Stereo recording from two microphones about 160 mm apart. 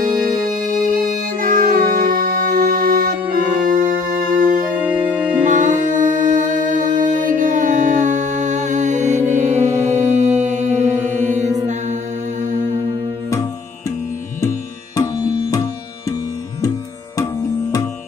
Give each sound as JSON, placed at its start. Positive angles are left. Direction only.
{"t": 0.4, "sound": "music", "side_deg": -60}
{"t": 4.7, "sound": "music", "side_deg": -10}
{"t": 5.5, "sound": "humming", "side_deg": -50}
{"t": 11.0, "sound": "music", "side_deg": -50}
{"t": 11.6, "sound": "mantra", "side_deg": -50}
{"t": 15.0, "sound": "music", "side_deg": 20}
{"t": 17.2, "sound": "music", "side_deg": 20}